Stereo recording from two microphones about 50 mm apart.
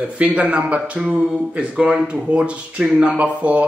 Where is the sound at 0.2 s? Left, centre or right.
Right.